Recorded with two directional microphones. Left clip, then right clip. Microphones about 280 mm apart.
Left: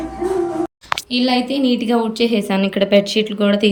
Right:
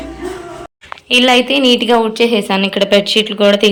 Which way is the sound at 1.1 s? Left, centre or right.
Right.